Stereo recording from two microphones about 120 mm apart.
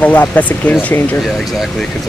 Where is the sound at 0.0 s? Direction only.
15° left (ahead or behind).